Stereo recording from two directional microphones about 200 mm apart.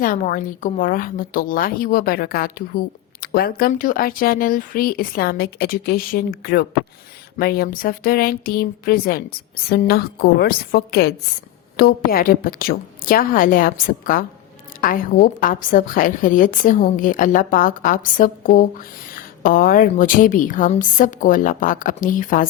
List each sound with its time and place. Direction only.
0.0 s a woman's voice: 45° left (ahead or behind)